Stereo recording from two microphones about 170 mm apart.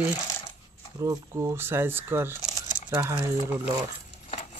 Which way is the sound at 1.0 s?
20° right (ahead or behind).